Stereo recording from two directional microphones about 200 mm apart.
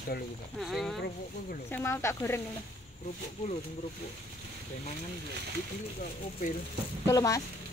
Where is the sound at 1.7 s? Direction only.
15° left (ahead or behind).